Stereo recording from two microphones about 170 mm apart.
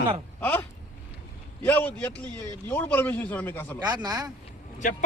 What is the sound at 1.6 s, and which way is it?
A man's voice, 10° left (ahead or behind).